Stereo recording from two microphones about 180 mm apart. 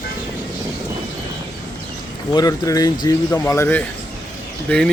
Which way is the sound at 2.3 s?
20° left (ahead or behind).